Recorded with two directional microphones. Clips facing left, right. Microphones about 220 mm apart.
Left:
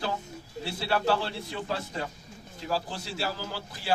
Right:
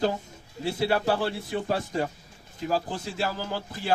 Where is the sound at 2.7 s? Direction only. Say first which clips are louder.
Right 3 dB; 50° right (ahead or behind).